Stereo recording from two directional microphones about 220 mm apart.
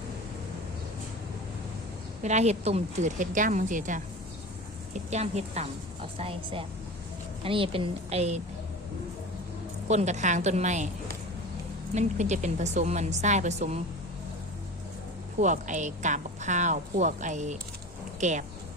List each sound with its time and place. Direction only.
2.2 s a woman's voice: 30° right (ahead or behind)
9.9 s a woman's voice: 30° right (ahead or behind)
11.9 s a woman's voice: 30° right (ahead or behind)
15.4 s a woman's voice: 35° right (ahead or behind)